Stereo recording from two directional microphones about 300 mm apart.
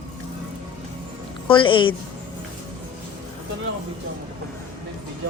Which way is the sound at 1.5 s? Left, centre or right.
Centre.